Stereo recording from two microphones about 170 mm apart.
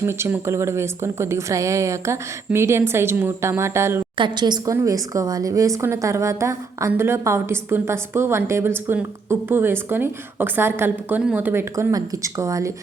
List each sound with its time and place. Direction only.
0.0 s a woman's voice: 15° right (ahead or behind)
4.2 s a woman's voice: 25° right (ahead or behind)